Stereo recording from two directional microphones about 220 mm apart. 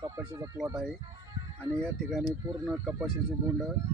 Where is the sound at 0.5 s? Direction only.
Centre (ahead or behind).